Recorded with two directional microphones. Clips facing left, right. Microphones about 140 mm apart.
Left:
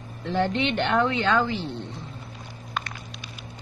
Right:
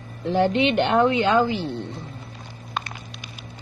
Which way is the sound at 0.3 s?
15° right (ahead or behind).